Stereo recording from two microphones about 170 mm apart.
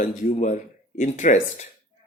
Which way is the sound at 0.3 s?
45° left (ahead or behind).